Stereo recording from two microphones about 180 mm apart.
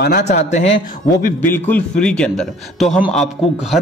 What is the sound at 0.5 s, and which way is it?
Speech, 40° left (ahead or behind).